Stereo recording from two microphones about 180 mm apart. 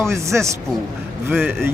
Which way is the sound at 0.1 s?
15° right (ahead or behind).